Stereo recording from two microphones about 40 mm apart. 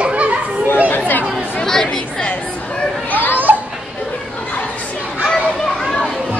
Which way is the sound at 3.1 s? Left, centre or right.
Left.